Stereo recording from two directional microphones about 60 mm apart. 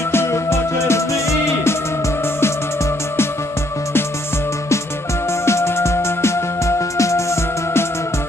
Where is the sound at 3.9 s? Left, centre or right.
Left.